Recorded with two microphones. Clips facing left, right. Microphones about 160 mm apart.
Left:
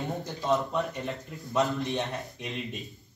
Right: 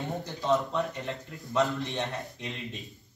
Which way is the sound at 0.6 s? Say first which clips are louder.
Left 1 dB; centre (ahead or behind).